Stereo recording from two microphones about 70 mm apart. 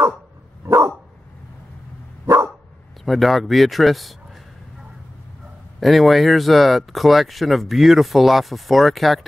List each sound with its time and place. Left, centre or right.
0.7 s dog: right
2.2 s dog: right
3.1 s speech: centre
5.8 s speech: centre